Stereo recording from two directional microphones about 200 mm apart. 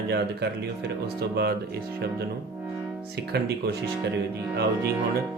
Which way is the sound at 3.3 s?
55° right (ahead or behind).